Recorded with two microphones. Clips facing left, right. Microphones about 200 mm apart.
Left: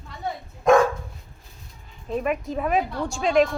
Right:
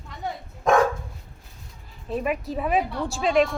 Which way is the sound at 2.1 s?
Centre (ahead or behind).